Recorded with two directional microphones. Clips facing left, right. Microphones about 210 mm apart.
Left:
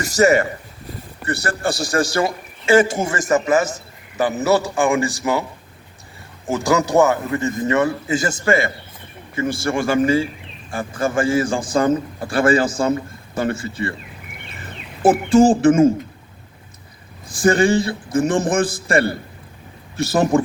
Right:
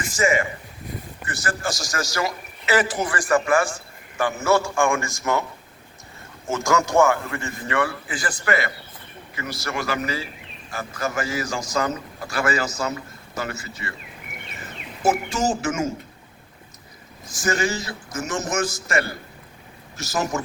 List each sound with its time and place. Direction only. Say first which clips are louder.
0.0 s a man's voice: left 7 dB; 40° left (ahead or behind); by 5.4 s 20° left (ahead or behind)
6.9 s a man's voice: left 2 dB; 20° left (ahead or behind)
15.0 s speech: left 6 dB; 55° left (ahead or behind)
15.6 s a man's voice: left 12 dB; 30° left (ahead or behind)
17.4 s a man's voice: left 9 dB; 30° left (ahead or behind)
20.1 s a man's voice: left 9 dB; 35° left (ahead or behind)